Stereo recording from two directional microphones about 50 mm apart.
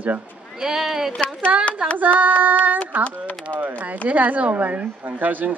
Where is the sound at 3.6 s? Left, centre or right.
Right.